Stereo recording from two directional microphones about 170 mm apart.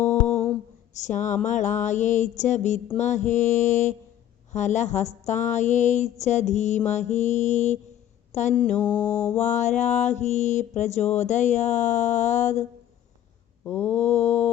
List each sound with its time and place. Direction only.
0.0 s a sound: 40° left (ahead or behind)
0.9 s mantra: 45° left (ahead or behind)
8.6 s mantra: 10° left (ahead or behind)
9.3 s mantra: 45° left (ahead or behind)
13.8 s mantra: 40° left (ahead or behind)